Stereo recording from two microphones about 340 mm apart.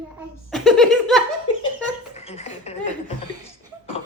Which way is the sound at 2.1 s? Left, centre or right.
Centre.